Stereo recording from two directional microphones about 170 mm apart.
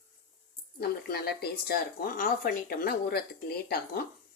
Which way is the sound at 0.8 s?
65° left (ahead or behind).